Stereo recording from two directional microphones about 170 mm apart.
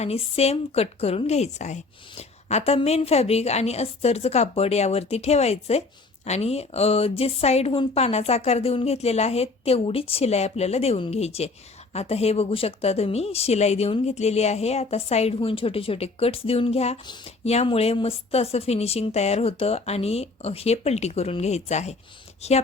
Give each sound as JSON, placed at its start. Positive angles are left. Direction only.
{"t": 0.0, "sound": "a woman's voice", "side_deg": 35}